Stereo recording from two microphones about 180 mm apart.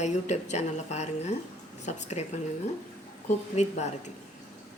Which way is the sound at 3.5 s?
40° left (ahead or behind).